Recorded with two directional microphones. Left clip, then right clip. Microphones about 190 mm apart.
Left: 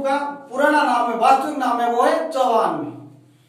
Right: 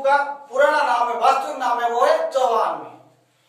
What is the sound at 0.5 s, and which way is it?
A man's voice, 10° right (ahead or behind).